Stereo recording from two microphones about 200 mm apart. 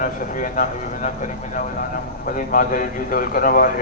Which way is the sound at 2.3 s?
45° left (ahead or behind).